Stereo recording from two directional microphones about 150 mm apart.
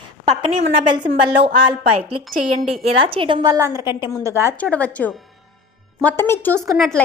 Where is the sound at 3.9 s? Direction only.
30° left (ahead or behind).